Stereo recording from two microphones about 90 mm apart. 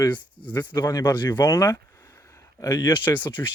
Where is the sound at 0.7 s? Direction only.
50° left (ahead or behind).